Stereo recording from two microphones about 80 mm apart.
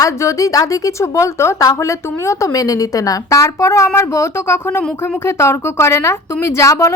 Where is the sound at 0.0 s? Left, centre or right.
Left.